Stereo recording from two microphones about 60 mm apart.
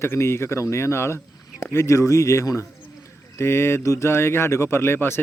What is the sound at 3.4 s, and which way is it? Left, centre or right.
Speech, left.